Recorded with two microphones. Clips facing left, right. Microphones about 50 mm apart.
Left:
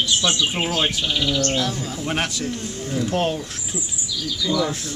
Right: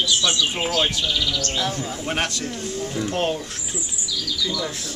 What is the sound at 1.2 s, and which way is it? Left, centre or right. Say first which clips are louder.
Bird: left 4 dB; left.